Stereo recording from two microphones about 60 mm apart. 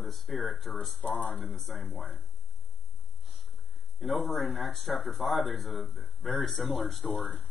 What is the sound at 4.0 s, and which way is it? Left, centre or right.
A man's voice, centre.